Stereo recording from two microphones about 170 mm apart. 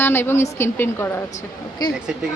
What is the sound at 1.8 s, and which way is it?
Speech, 25° left (ahead or behind).